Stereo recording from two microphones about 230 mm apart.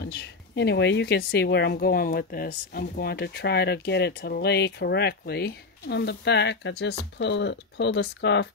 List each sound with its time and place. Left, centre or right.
0.0 s speech: left